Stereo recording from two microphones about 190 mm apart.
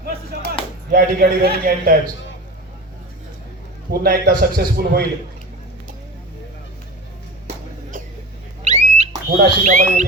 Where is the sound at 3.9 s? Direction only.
50° right (ahead or behind).